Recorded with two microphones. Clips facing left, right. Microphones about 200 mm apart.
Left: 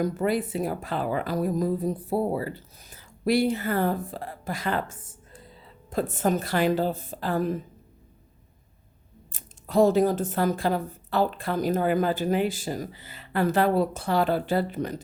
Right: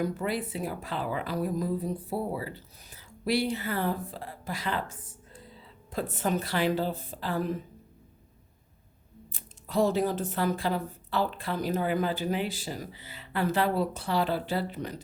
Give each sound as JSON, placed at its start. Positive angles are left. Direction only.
{"t": 0.0, "sound": "speech", "side_deg": 45}
{"t": 9.3, "sound": "speech", "side_deg": 45}